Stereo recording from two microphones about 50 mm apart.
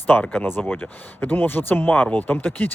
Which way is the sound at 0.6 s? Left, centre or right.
Left.